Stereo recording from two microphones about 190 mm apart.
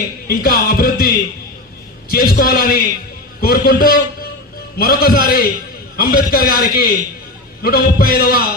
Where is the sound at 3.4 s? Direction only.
50° left (ahead or behind).